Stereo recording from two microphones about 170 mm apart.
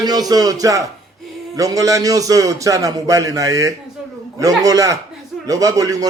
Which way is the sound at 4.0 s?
5° right (ahead or behind).